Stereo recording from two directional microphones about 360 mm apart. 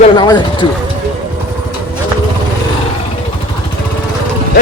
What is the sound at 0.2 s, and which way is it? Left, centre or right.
Speech, centre.